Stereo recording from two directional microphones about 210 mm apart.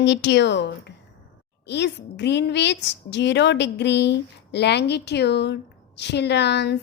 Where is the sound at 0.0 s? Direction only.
55° left (ahead or behind).